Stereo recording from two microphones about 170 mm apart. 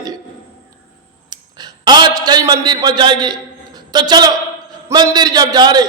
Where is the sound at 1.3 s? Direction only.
25° right (ahead or behind).